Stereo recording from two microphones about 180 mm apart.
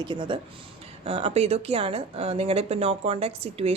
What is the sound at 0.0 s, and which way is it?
A woman's voice, 25° right (ahead or behind).